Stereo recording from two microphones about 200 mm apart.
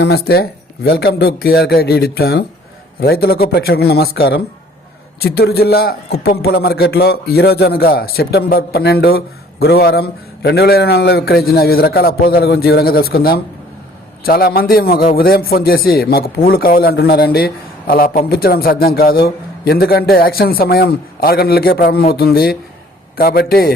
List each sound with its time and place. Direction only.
0.0 s a man's voice: 50° left (ahead or behind)